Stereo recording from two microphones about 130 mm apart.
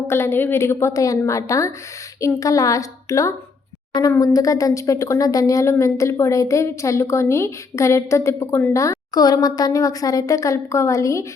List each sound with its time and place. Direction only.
0.1 s a woman's voice: 20° left (ahead or behind)